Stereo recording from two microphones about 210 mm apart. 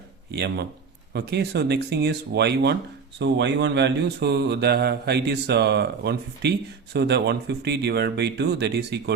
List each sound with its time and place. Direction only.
0.3 s a man's voice: 55° right (ahead or behind)